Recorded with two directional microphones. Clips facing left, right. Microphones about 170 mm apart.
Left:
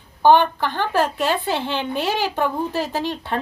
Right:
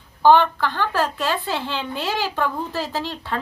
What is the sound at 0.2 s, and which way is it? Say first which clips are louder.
Speech: even; 20° left (ahead or behind).